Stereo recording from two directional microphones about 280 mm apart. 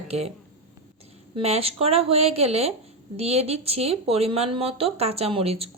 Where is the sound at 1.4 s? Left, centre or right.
Right.